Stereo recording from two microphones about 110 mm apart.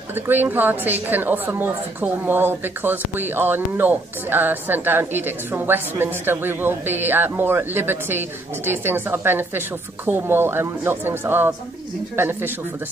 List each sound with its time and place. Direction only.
0.1 s a woman's voice: 20° right (ahead or behind)